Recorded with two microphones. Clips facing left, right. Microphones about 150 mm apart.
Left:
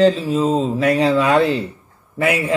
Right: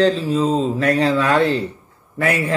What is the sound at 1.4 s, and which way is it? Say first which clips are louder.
Speech: even; 35° right (ahead or behind).